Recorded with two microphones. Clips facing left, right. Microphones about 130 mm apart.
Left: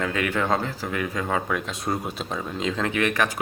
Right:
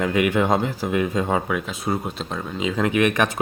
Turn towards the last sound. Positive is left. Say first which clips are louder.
# right 4 dB
turn(degrees=-20)  # may be behind; listen again after turning